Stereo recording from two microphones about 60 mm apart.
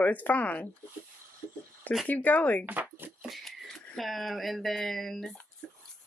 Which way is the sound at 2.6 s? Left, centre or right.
Right.